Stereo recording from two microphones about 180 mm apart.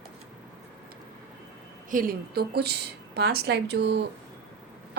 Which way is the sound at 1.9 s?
50° right (ahead or behind).